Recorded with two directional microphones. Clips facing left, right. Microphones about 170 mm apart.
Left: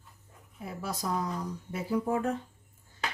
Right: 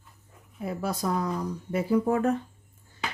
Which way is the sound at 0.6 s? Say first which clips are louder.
Right 6 dB; 60° right (ahead or behind).